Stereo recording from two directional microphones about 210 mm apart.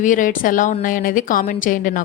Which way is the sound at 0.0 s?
40° left (ahead or behind).